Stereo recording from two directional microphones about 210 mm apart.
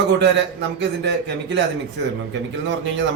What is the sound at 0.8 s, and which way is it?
Speech, 60° right (ahead or behind).